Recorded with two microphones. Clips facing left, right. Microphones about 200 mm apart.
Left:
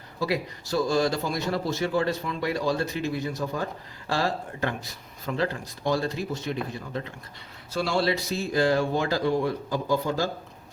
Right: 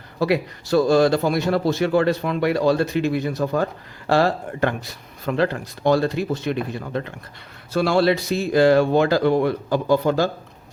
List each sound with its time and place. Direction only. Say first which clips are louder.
0.2 s a man's voice: right 7 dB; 65° right (ahead or behind)